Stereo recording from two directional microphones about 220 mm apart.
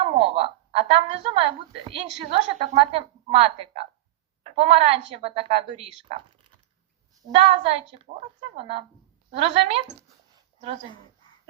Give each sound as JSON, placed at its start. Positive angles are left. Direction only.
{"t": 0.0, "sound": "a woman's voice", "side_deg": -25}